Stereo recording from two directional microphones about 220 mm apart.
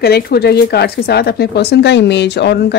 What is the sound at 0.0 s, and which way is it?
Speech, 45° left (ahead or behind).